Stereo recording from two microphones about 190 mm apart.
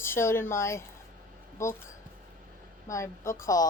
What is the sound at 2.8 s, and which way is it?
Speech, 15° left (ahead or behind).